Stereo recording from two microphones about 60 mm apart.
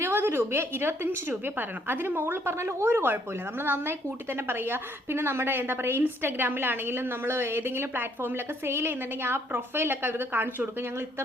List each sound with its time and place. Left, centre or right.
0.0 s a woman's voice: right
2.5 s a woman's voice: right